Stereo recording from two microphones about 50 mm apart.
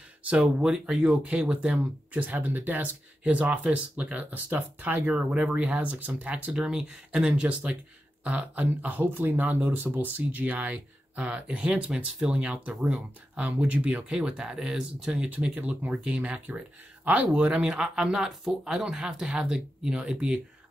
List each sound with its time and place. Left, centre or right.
0.2 s speech: right
6.5 s speech: centre
7.2 s speech: right
13.4 s speech: right
14.0 s speech: centre
15.2 s speech: right